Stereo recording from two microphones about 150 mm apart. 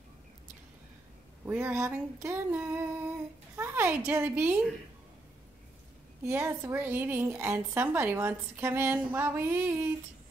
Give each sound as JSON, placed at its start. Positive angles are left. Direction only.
{"t": 1.4, "sound": "a woman's voice", "side_deg": -15}
{"t": 6.2, "sound": "a woman's voice", "side_deg": -20}